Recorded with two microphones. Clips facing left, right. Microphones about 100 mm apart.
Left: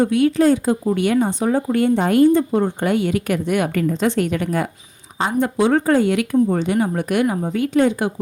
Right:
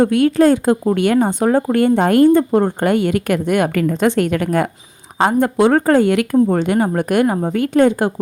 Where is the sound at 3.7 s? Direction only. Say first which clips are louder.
Right 2 dB; 85° right.